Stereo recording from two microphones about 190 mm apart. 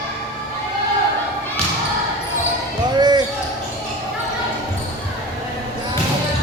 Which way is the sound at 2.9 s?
20° right (ahead or behind).